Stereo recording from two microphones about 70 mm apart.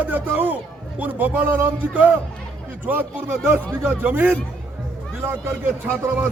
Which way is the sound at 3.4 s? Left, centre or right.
Right.